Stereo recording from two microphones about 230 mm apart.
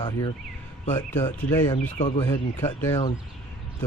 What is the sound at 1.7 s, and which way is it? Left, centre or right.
Speech, left.